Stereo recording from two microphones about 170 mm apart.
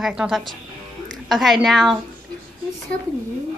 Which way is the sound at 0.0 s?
Centre (ahead or behind).